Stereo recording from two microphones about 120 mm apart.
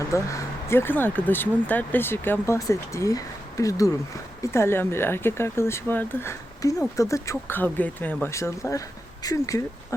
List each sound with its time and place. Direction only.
0.0 s speech: 25° left (ahead or behind)